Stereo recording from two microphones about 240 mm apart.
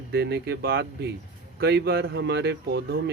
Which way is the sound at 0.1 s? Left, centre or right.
Right.